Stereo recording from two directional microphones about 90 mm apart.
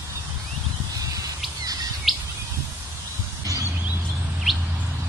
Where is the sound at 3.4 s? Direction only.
35° right (ahead or behind).